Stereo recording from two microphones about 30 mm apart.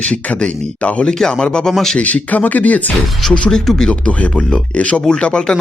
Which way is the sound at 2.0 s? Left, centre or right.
Left.